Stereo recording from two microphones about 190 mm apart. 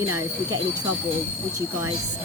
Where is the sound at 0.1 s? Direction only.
15° right (ahead or behind).